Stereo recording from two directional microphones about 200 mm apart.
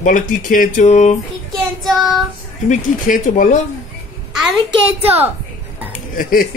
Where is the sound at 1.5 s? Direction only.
Centre (ahead or behind).